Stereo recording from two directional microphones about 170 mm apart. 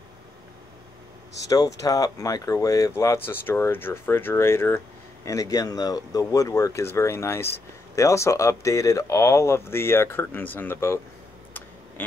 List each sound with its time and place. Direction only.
1.5 s speech: 20° left (ahead or behind)